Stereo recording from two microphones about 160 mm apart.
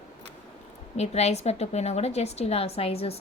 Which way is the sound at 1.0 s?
40° left (ahead or behind).